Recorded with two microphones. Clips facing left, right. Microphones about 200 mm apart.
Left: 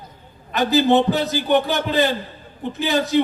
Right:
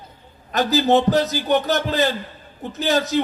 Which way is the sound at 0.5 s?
45° right (ahead or behind).